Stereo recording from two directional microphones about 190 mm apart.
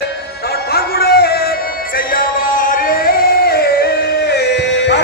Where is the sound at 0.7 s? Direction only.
55° left (ahead or behind).